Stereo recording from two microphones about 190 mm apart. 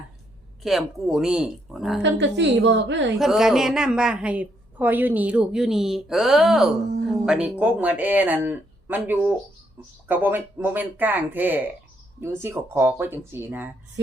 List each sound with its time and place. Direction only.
0.6 s a woman's voice: centre (ahead or behind)
2.0 s a woman's voice: 70° right (ahead or behind)
3.2 s a woman's voice: centre (ahead or behind)